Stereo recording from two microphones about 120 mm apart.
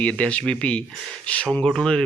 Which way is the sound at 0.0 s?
10° left (ahead or behind).